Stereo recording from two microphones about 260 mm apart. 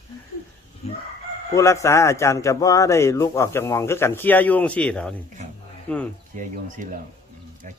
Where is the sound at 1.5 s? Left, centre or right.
Centre.